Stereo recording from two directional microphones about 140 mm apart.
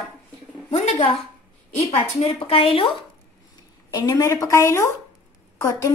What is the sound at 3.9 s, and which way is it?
Speech, 25° left (ahead or behind).